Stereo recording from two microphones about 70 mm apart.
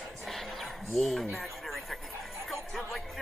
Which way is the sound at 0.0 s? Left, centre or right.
Centre.